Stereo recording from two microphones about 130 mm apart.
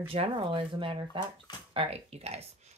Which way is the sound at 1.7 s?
50° right (ahead or behind).